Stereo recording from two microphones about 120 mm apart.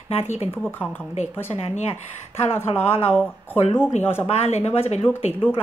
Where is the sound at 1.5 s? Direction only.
65° left (ahead or behind).